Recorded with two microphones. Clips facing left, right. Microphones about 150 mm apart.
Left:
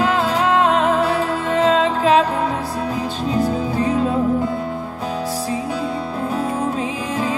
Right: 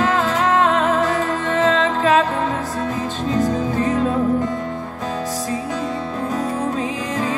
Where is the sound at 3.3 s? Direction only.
10° left (ahead or behind).